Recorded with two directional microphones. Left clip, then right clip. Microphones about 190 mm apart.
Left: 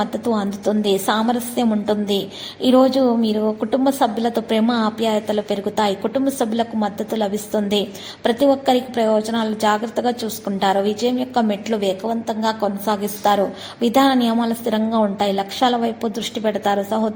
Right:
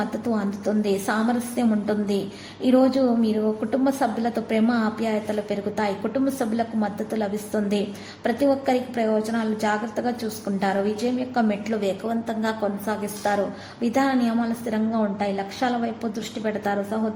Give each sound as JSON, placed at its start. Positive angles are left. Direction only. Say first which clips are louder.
{"t": 0.0, "sound": "a woman's voice", "louder": "left 5 dB", "side_deg": 10}